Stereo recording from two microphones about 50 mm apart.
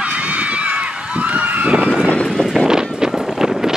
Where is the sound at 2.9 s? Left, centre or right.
Centre.